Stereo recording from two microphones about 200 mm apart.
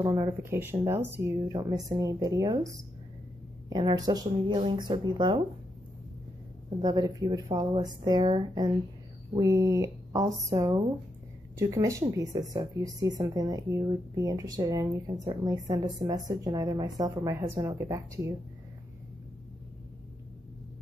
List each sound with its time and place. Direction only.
0.0 s a woman's voice: 15° right (ahead or behind)
6.8 s a woman's voice: 20° right (ahead or behind)